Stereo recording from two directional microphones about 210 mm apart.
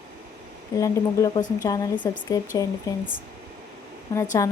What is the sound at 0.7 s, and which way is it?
Speech, 15° left (ahead or behind).